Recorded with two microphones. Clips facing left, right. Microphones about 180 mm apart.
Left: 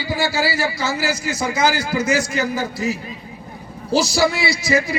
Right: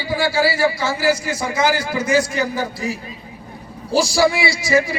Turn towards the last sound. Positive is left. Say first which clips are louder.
# right 1 dB
turn(degrees=20)  # may be behind; listen again after turning